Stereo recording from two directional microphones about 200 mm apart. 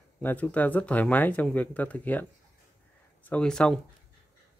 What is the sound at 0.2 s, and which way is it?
Speech, 10° left (ahead or behind).